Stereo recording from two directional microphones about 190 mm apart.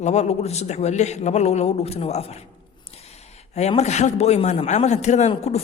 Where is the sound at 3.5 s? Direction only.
35° left (ahead or behind).